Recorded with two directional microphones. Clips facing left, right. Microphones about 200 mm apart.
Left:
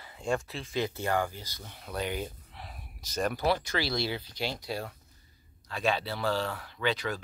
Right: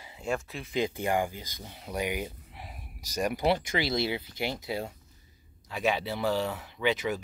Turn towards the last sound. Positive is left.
turn(degrees=-15)  # may be behind; listen again after turning